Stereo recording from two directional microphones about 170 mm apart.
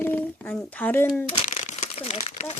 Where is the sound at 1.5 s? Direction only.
45° left (ahead or behind).